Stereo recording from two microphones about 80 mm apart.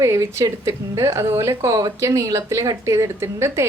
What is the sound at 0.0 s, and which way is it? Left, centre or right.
Speech, right.